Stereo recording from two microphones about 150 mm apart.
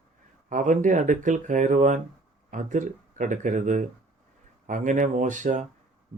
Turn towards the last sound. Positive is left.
turn(degrees=-55)  # may be behind; listen again after turning